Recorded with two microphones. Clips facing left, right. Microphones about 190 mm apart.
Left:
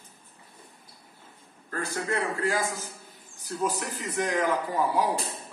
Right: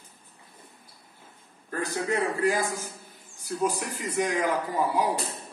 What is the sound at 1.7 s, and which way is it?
A man's voice, 15° right (ahead or behind).